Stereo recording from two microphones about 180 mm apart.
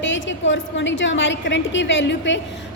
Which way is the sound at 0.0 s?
90° left.